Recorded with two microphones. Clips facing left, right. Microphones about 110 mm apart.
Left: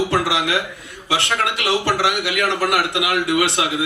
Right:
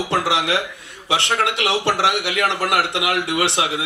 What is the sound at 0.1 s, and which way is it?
A man's voice, 25° right (ahead or behind).